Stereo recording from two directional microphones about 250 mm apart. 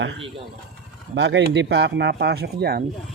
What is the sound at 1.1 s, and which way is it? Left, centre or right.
Speech, right.